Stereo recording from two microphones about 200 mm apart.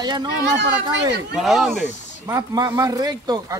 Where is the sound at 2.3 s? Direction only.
20° right (ahead or behind).